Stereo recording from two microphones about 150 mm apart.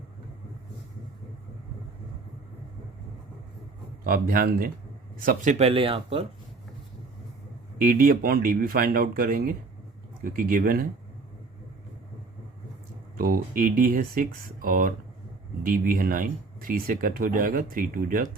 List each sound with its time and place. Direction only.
4.0 s speech: 70° right (ahead or behind)
5.1 s speech: 65° right (ahead or behind); by 6.2 s 40° right (ahead or behind)
7.8 s speech: 70° right (ahead or behind)
13.1 s speech: 80° right